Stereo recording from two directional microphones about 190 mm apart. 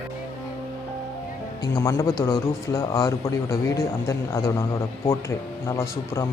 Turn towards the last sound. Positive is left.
turn(degrees=15)  # may be behind; listen again after turning